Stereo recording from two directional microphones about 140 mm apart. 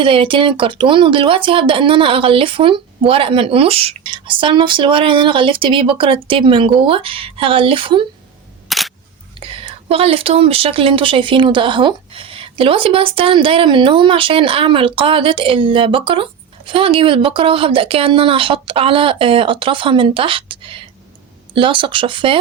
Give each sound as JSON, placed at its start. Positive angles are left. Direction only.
{"t": 0.0, "sound": "speech", "side_deg": -40}
{"t": 8.7, "sound": "single-lens reflex camera", "side_deg": 0}
{"t": 9.4, "sound": "speech", "side_deg": -40}